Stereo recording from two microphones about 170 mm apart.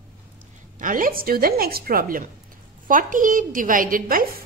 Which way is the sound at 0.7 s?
55° right (ahead or behind).